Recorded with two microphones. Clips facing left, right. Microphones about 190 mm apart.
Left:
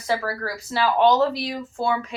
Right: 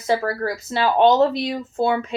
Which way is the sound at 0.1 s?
25° right (ahead or behind).